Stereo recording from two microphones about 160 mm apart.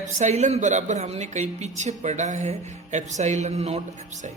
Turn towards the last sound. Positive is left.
turn(degrees=-40)  # may be behind; listen again after turning